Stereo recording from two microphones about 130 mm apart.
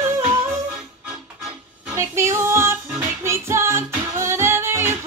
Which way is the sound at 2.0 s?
20° right (ahead or behind).